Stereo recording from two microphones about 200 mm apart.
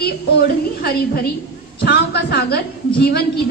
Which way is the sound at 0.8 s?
50° left (ahead or behind).